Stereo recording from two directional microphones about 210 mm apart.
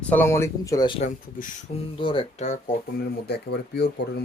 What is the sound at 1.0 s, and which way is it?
Speech, 40° left (ahead or behind).